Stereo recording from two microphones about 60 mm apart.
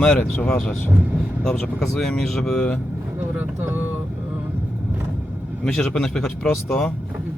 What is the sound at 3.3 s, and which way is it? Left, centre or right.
Speech, right.